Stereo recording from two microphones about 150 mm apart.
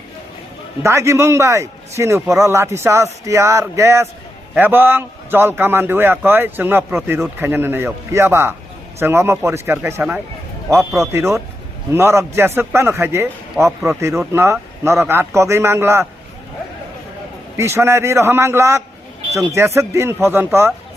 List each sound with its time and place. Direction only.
0.8 s a man's voice: 20° right (ahead or behind)
17.6 s a man's voice: 15° right (ahead or behind)